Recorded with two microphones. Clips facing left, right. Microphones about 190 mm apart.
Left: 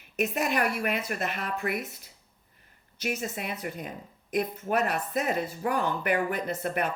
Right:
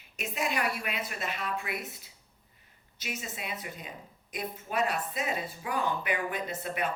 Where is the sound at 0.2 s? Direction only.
55° left (ahead or behind).